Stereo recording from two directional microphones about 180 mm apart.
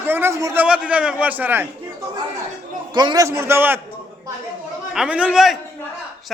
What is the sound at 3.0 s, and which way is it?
Speech, 20° right (ahead or behind).